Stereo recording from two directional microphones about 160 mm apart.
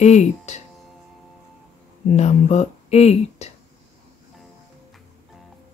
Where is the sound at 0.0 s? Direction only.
45° left (ahead or behind).